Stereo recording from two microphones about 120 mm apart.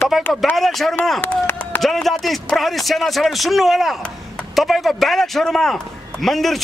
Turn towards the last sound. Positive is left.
turn(degrees=0)  # may be behind; listen again after turning